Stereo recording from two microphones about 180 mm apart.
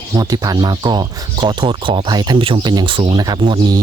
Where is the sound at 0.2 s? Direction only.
20° right (ahead or behind).